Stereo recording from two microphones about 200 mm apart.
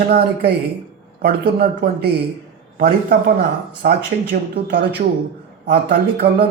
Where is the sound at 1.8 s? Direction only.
55° right (ahead or behind).